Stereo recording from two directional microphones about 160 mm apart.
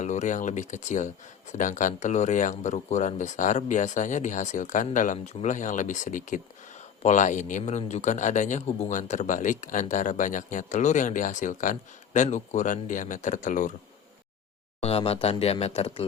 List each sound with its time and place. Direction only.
0.0 s speech: 50° left (ahead or behind)
14.8 s speech: 40° left (ahead or behind)